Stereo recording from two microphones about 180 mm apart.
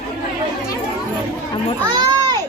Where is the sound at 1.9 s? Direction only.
25° right (ahead or behind).